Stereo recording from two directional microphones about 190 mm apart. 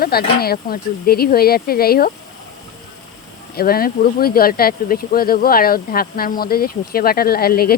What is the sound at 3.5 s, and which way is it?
Speech, 50° left (ahead or behind).